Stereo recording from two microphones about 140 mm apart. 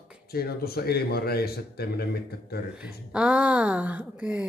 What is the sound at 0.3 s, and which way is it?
A man's voice, 90° left.